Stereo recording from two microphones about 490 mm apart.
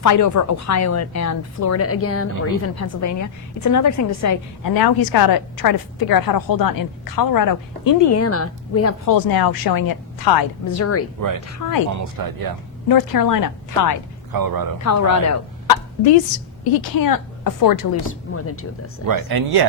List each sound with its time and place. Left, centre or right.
0.0 s a woman's voice: left
9.1 s a woman's voice: left
10.8 s speech: left
11.9 s speech: right
12.9 s a woman's voice: left
14.3 s speech: right
14.8 s a woman's voice: left
15.6 s a sound: left
16.7 s a woman's voice: left
18.1 s speech: left
19.0 s speech: right